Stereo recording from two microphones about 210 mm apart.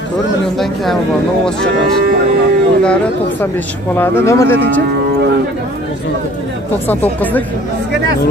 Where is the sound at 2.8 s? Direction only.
5° left (ahead or behind).